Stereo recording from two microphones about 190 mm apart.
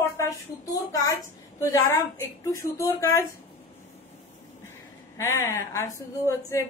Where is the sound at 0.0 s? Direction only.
15° left (ahead or behind).